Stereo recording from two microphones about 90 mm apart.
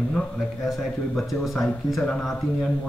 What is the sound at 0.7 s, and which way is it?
Speech, centre (ahead or behind).